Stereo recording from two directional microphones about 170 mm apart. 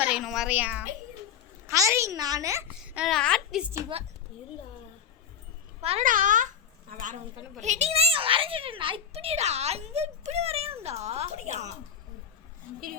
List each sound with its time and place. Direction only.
0.0 s a woman's voice: 5° right (ahead or behind)
2.8 s a woman's voice: 5° right (ahead or behind)
5.8 s a child's voice: 35° right (ahead or behind)
6.1 s babbling: 50° right (ahead or behind)
7.6 s a child's voice: 40° right (ahead or behind)